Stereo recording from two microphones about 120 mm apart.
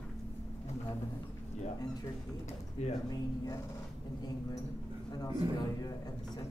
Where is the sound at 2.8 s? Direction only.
65° left (ahead or behind).